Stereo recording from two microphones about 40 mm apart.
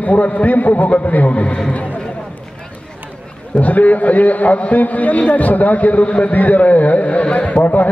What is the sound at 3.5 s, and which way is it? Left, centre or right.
A man's voice, left.